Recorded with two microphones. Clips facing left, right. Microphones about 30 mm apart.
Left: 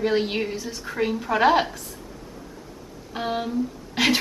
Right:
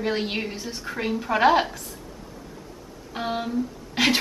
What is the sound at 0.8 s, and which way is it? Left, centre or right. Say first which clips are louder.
A woman's voice: left 2 dB; centre.